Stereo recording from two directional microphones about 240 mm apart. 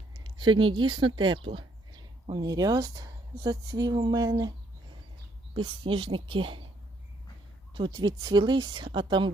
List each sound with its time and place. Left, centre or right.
0.1 s speech: centre
5.5 s speech: right
7.7 s speech: centre